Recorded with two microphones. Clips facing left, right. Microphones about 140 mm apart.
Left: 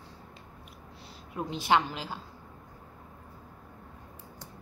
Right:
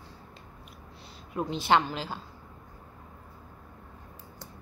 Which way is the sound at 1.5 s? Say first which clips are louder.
Right 1 dB; 10° left (ahead or behind).